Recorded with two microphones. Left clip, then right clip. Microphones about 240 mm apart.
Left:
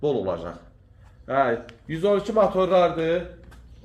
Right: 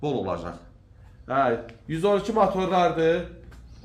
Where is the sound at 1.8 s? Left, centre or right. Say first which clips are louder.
Left 1 dB; centre.